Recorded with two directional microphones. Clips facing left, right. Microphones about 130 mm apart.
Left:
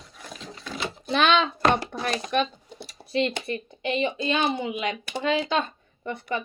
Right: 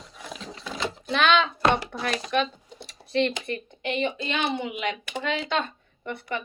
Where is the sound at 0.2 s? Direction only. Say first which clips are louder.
Right 2 dB; centre (ahead or behind).